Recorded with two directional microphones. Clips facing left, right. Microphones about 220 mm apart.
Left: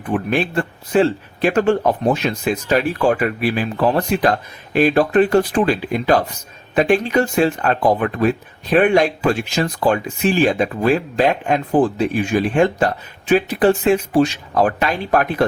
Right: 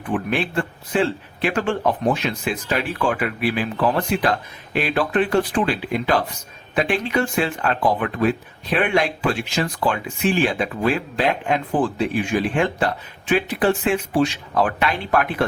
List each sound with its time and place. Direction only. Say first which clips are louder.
0.3 s speech: left 3 dB; 40° left (ahead or behind)